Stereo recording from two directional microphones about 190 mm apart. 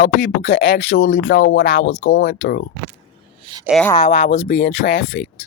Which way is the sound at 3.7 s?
5° left (ahead or behind).